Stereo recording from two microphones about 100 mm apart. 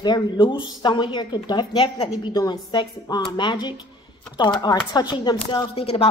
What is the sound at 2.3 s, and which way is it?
A woman's voice, 45° left (ahead or behind).